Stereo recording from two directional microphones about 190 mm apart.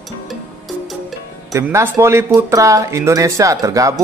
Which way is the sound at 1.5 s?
15° right (ahead or behind).